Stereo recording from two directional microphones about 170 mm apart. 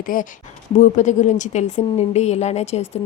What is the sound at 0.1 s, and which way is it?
A woman's voice, 55° left (ahead or behind).